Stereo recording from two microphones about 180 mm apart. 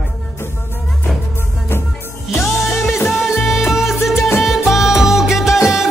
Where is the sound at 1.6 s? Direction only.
15° left (ahead or behind).